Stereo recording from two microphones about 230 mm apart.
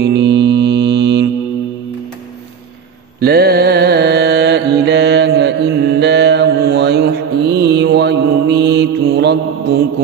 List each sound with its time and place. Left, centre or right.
0.0 s mantra: right
3.2 s mantra: right